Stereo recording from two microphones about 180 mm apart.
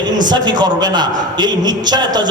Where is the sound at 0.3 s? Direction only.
25° right (ahead or behind).